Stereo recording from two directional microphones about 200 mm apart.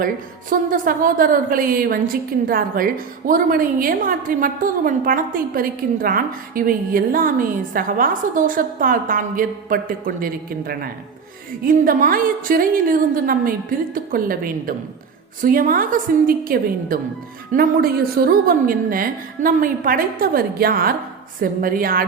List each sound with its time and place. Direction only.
0.5 s a woman's voice: 45° right (ahead or behind)